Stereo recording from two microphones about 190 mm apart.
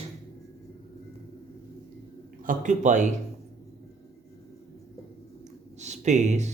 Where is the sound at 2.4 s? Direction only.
45° right (ahead or behind).